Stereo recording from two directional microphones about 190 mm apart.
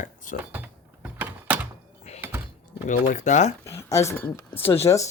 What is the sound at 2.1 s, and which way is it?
Thunk, 35° left (ahead or behind).